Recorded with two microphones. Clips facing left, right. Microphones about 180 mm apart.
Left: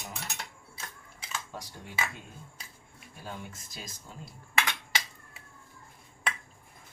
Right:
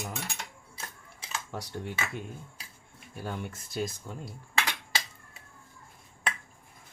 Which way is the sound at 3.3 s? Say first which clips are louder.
Right 4 dB; 55° right (ahead or behind).